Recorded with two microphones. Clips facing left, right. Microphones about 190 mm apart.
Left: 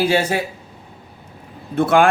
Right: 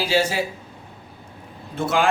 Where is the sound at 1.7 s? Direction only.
55° left (ahead or behind).